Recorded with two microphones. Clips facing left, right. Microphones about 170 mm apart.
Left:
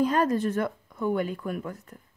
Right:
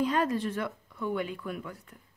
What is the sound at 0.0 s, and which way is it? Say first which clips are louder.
Speech: left 4 dB; 45° left (ahead or behind).